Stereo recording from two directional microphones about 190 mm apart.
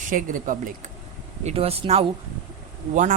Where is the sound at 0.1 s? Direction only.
45° right (ahead or behind).